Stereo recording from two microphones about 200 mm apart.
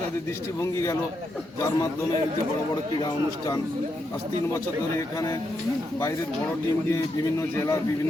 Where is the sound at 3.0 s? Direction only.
20° left (ahead or behind).